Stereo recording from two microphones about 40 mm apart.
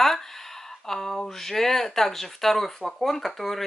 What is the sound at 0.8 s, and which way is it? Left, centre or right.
Speech, centre.